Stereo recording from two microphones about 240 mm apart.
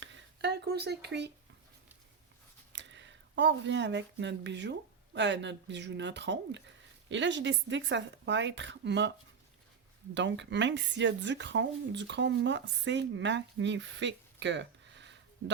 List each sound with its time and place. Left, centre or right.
0.0 s a sound: right
2.7 s speech: right
10.2 s speech: right